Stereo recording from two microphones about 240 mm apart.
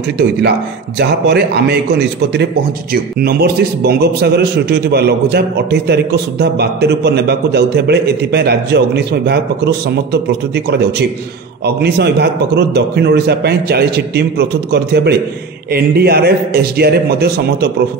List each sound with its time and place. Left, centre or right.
0.4 s a man's voice: right
2.9 s a man's voice: right